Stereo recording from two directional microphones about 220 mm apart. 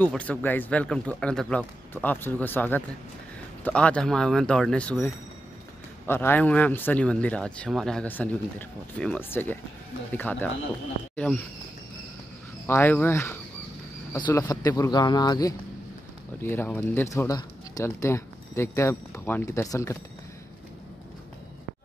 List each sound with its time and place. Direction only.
0.0 s speech: 5° left (ahead or behind)
12.6 s speech: 10° left (ahead or behind)